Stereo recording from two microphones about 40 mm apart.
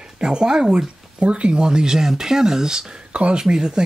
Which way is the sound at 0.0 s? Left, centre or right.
Right.